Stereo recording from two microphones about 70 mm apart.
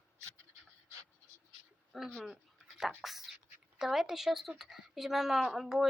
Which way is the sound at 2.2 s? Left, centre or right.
Centre.